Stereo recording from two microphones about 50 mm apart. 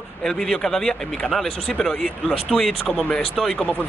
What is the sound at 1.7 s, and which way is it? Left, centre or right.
Speech, left.